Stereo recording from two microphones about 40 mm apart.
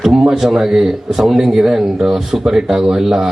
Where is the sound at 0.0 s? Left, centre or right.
Centre.